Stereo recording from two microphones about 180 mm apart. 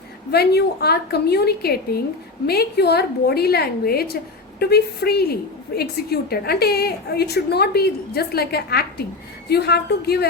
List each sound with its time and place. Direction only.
0.3 s a woman's voice: 65° left (ahead or behind)